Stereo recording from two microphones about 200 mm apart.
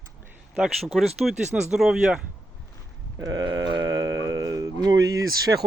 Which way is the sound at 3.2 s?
20° right (ahead or behind).